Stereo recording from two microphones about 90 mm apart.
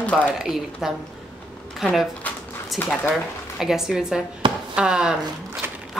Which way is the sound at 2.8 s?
20° left (ahead or behind).